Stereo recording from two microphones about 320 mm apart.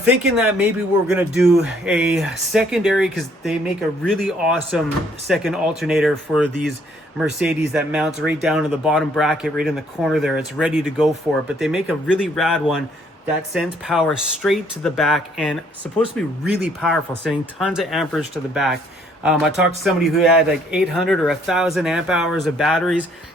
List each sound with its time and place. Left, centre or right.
0.0 s speech: centre